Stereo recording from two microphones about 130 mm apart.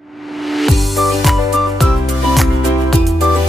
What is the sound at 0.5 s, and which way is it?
Music, centre (ahead or behind).